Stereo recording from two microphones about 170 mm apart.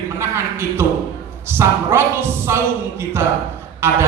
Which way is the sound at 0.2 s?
15° right (ahead or behind).